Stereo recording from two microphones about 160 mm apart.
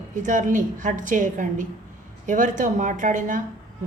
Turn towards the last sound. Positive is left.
turn(degrees=-55)  # may be behind; listen again after turning